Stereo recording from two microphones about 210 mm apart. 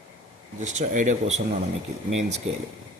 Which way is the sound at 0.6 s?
35° right (ahead or behind).